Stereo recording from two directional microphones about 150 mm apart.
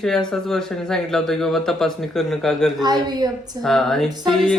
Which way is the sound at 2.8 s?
25° right (ahead or behind).